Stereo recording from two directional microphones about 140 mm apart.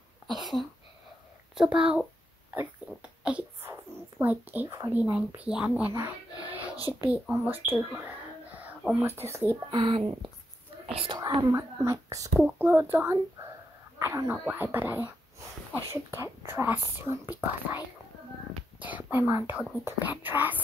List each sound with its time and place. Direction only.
0.3 s speech: centre (ahead or behind)
6.8 s a child's voice: 25° left (ahead or behind)
7.1 s speech: 15° right (ahead or behind)
8.5 s speech: 10° right (ahead or behind)
9.7 s speech: 35° right (ahead or behind)
11.1 s speech: 25° right (ahead or behind)